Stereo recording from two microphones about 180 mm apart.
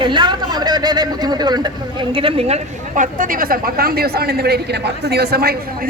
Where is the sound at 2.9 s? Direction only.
45° right (ahead or behind).